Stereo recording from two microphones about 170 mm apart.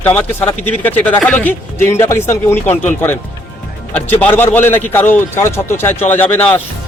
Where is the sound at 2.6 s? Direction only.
45° left (ahead or behind).